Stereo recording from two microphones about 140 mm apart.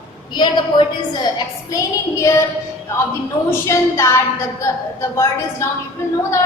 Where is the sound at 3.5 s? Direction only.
20° left (ahead or behind).